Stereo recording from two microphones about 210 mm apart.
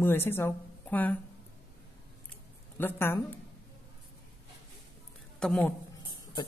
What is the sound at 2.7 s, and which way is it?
Speech, 10° left (ahead or behind).